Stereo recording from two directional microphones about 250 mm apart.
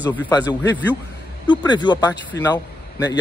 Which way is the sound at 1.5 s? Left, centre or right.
Centre.